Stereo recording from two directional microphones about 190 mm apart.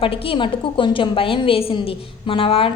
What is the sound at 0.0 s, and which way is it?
A woman's voice, 30° left (ahead or behind).